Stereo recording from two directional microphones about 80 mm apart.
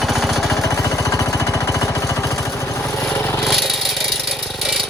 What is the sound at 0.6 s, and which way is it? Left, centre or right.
Jackhammer, left.